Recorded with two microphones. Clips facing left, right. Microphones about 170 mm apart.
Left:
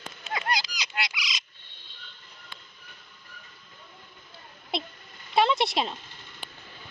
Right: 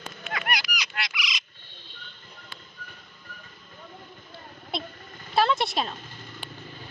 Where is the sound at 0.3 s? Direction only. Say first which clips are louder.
Left 1 dB; 25° left (ahead or behind).